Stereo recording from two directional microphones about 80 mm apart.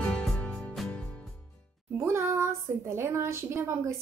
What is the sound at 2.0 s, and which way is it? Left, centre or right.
A woman's voice, right.